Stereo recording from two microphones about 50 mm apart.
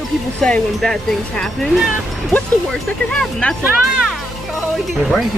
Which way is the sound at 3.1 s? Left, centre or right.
Centre.